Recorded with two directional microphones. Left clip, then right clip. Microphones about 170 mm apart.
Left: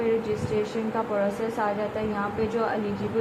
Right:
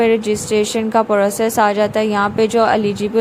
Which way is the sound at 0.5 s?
55° right (ahead or behind).